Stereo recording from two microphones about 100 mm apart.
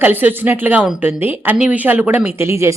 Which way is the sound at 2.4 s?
25° right (ahead or behind).